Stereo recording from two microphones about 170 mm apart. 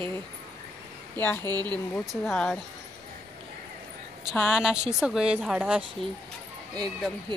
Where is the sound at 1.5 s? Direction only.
25° right (ahead or behind).